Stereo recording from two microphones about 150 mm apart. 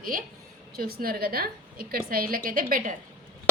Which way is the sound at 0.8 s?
85° right.